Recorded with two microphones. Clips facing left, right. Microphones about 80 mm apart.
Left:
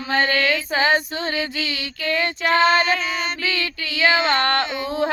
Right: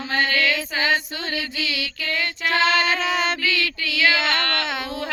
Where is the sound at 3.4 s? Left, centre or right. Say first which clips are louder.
Right 1 dB; left.